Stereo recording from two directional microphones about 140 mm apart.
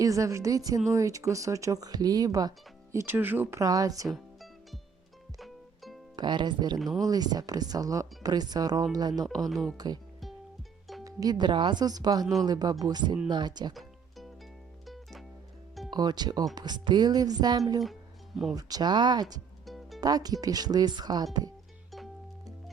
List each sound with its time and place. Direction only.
0.0 s speech: 25° right (ahead or behind)
4.1 s music: centre (ahead or behind)
6.1 s speech: 30° right (ahead or behind)
6.7 s speech: centre (ahead or behind)
7.0 s speech: 30° right (ahead or behind)
11.0 s speech: 25° right (ahead or behind)
12.2 s speech: centre (ahead or behind)
12.5 s speech: 30° right (ahead or behind)
14.8 s music: centre (ahead or behind)
15.9 s speech: 30° right (ahead or behind)
19.6 s music: centre (ahead or behind)
20.0 s speech: 25° right (ahead or behind)